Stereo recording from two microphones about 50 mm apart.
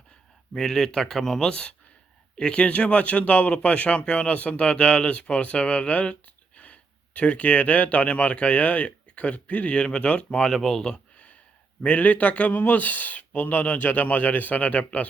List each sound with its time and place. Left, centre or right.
0.5 s speech: centre
11.8 s speech: left